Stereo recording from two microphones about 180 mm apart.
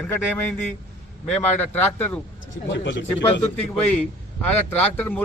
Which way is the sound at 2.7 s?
90° left.